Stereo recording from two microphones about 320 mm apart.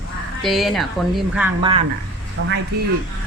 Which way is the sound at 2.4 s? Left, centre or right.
Right.